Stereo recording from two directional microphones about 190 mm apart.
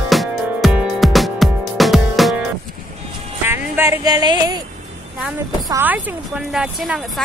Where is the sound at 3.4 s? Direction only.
10° right (ahead or behind).